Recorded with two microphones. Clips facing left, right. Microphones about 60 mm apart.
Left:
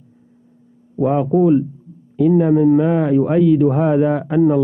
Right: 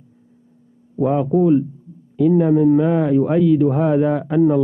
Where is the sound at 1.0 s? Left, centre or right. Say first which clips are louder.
Left 1 dB; centre.